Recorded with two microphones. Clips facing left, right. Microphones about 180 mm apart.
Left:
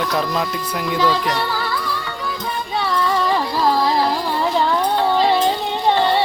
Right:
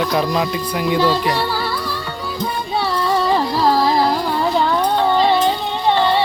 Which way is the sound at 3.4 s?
5° right (ahead or behind).